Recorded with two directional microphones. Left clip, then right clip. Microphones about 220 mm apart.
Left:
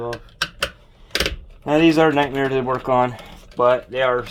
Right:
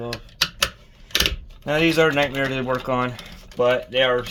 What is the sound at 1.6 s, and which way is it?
Speech, 35° left (ahead or behind).